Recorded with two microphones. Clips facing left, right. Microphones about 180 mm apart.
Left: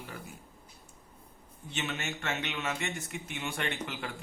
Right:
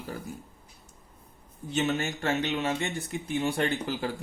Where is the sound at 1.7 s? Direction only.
35° right (ahead or behind).